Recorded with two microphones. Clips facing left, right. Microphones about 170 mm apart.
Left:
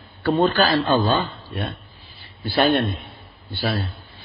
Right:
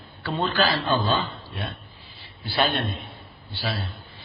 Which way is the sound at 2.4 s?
55° left (ahead or behind).